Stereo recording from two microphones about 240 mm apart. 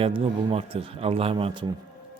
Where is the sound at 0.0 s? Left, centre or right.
Right.